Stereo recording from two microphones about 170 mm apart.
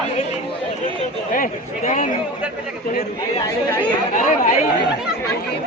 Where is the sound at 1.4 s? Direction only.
50° left (ahead or behind).